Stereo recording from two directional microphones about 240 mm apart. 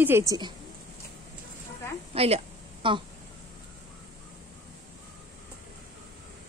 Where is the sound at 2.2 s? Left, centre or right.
Right.